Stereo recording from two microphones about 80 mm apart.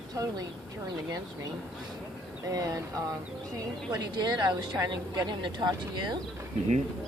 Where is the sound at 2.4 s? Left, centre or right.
Right.